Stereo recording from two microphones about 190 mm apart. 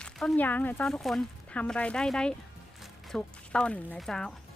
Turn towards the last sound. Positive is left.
turn(degrees=5)  # may be behind; listen again after turning